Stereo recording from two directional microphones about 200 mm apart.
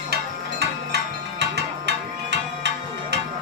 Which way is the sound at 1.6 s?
60° right (ahead or behind).